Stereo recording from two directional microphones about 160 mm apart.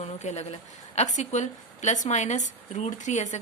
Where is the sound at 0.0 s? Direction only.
45° left (ahead or behind).